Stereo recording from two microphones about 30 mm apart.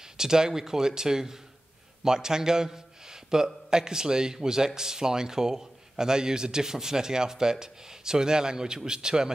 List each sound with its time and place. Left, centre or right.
0.2 s a man's voice: centre